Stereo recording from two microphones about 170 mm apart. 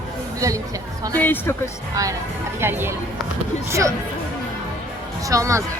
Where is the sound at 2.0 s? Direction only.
20° right (ahead or behind).